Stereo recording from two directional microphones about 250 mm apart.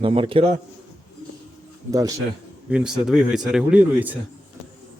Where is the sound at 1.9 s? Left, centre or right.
Centre.